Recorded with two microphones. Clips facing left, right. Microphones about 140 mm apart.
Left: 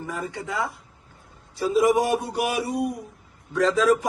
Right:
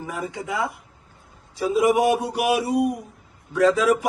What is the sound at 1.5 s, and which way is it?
Speech, 15° right (ahead or behind).